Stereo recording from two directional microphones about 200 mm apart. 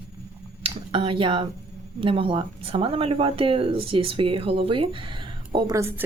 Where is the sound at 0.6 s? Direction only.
25° right (ahead or behind).